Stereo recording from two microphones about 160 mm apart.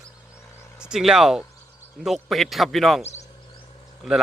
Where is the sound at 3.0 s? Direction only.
40° left (ahead or behind).